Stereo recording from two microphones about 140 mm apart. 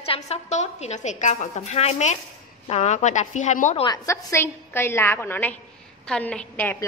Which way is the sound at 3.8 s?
20° left (ahead or behind).